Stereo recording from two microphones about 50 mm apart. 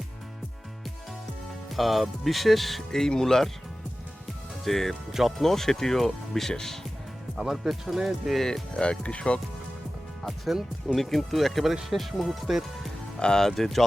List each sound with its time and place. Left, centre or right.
1.7 s speech: centre
4.6 s speech: centre
7.5 s speech: centre
8.7 s speech: left
10.2 s speech: centre
13.1 s speech: centre
13.5 s speech: centre